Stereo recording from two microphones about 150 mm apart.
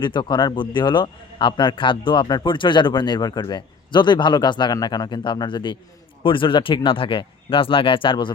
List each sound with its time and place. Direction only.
0.0 s a man's voice: 30° left (ahead or behind)